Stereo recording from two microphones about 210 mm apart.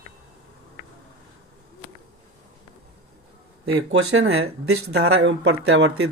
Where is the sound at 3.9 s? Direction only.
80° right.